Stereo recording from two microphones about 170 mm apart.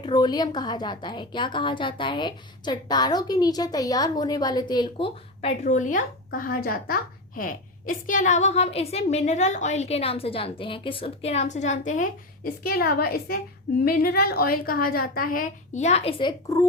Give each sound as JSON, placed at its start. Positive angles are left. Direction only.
{"t": 0.0, "sound": "a woman's voice", "side_deg": 25}